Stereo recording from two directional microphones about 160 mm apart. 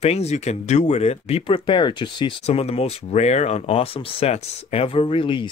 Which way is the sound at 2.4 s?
40° left (ahead or behind).